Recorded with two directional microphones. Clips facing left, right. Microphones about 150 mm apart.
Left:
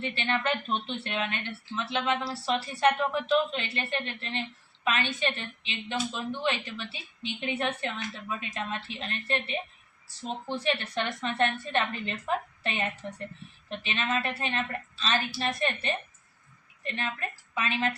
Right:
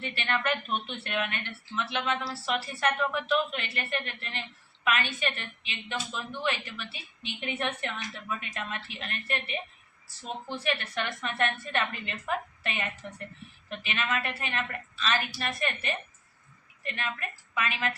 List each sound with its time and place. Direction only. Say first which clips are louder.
0.0 s a woman's voice: left 1 dB; 25° left (ahead or behind)
2.5 s a woman's voice: left 4 dB; 30° left (ahead or behind)